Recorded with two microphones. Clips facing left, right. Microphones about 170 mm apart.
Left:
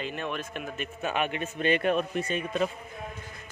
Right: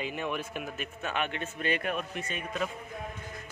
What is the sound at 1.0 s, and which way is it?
Speech, 10° left (ahead or behind).